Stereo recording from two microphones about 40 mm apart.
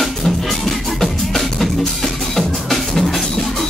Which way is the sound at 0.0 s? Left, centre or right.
Centre.